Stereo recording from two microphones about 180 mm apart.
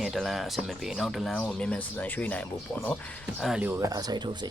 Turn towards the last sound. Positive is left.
turn(degrees=-25)  # may be behind; listen again after turning